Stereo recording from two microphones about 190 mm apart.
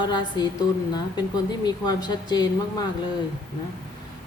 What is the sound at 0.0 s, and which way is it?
Speech, 25° left (ahead or behind).